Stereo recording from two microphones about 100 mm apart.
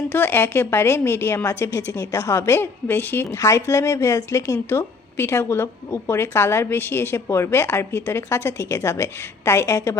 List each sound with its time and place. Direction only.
0.1 s a woman's voice: 20° left (ahead or behind)
3.3 s a woman's voice: 30° left (ahead or behind)